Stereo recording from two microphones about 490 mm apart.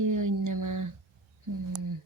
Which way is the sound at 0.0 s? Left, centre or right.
Right.